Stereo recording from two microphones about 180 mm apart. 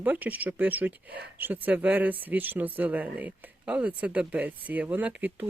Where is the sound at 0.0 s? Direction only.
10° right (ahead or behind).